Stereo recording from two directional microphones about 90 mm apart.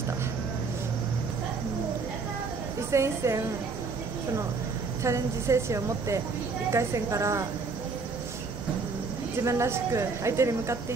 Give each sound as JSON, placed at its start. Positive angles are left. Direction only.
{"t": 2.9, "sound": "speech", "side_deg": -35}
{"t": 5.0, "sound": "speech", "side_deg": -35}
{"t": 9.4, "sound": "speech", "side_deg": -30}